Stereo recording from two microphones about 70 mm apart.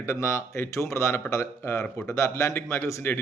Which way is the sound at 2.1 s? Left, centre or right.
Left.